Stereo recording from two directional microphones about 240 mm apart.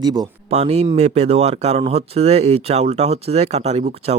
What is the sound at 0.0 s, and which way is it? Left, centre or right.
Speech, centre.